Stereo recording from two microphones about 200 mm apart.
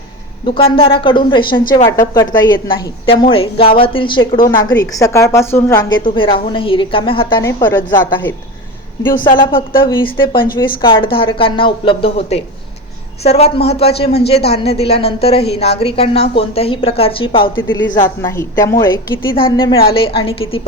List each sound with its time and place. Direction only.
0.4 s a woman's voice: 25° left (ahead or behind)
9.3 s speech: 45° left (ahead or behind)
9.8 s a woman's voice: 25° left (ahead or behind)
17.6 s a woman's voice: 70° left (ahead or behind)
18.2 s a woman's voice: 15° left (ahead or behind)